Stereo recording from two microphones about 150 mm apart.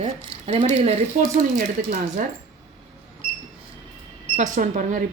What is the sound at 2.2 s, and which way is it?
Speech, 65° right (ahead or behind).